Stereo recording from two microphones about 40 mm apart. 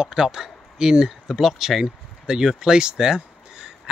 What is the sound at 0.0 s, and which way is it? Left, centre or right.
Speech, centre.